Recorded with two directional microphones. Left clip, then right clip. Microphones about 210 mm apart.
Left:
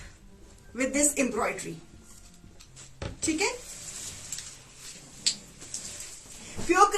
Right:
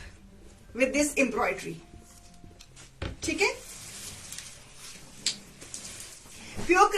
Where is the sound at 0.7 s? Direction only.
25° left (ahead or behind).